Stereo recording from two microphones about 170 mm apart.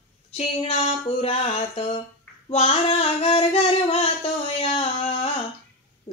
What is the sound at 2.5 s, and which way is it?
Singing, 40° left (ahead or behind).